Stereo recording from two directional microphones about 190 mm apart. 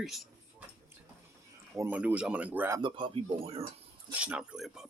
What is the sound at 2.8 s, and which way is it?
Speech, 25° right (ahead or behind).